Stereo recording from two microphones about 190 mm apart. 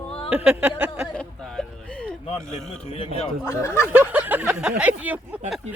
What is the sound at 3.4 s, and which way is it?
Speech, 15° left (ahead or behind).